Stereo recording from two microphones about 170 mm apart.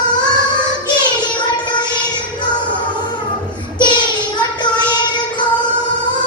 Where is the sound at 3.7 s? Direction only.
25° left (ahead or behind).